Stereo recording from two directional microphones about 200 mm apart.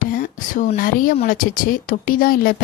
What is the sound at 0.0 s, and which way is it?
Speech, 45° left (ahead or behind).